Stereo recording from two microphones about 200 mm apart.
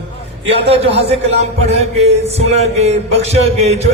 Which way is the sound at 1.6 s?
35° right (ahead or behind).